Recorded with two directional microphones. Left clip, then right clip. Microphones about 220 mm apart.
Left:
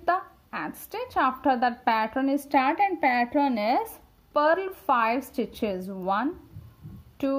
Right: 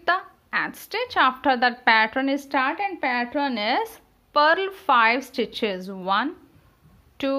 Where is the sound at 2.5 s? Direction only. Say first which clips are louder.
Left 3 dB; 25° left (ahead or behind).